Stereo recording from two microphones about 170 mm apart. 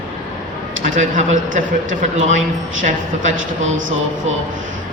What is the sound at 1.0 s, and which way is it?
Speech, 50° right (ahead or behind).